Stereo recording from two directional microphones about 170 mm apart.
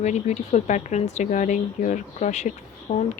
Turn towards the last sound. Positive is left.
turn(degrees=45)  # may be behind; listen again after turning